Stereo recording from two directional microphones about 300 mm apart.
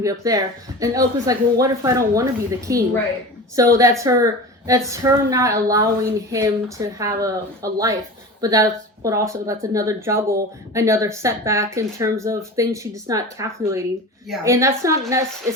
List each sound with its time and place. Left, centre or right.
0.0 s speech: centre